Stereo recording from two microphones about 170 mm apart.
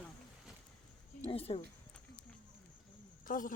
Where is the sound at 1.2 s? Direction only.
35° left (ahead or behind).